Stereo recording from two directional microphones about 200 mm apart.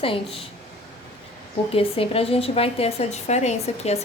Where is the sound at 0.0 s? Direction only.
30° left (ahead or behind).